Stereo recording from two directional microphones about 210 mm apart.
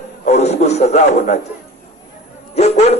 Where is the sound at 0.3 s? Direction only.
35° left (ahead or behind).